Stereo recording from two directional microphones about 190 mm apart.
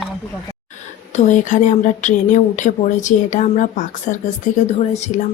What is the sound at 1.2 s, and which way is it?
A woman's voice, 40° left (ahead or behind).